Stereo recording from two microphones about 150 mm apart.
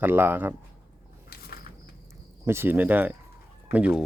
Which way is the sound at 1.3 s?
90° left.